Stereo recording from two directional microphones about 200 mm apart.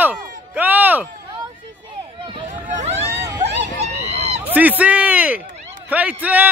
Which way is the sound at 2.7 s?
35° right (ahead or behind).